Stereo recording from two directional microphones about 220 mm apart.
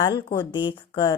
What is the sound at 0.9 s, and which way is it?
Speech, 20° left (ahead or behind).